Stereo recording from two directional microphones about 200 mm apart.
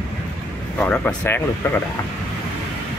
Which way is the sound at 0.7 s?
5° left (ahead or behind).